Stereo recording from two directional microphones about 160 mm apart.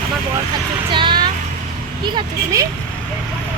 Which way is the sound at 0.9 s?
30° right (ahead or behind).